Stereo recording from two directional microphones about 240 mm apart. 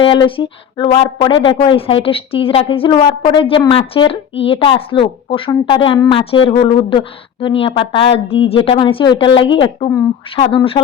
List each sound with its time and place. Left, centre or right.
0.0 s speech: centre